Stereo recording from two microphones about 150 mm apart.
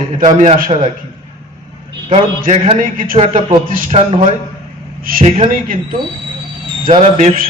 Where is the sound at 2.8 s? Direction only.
65° right (ahead or behind).